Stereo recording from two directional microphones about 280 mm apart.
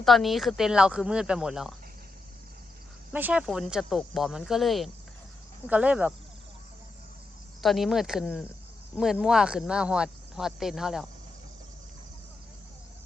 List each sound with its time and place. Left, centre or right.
0.0 s speech: centre
3.1 s speech: centre
7.6 s speech: centre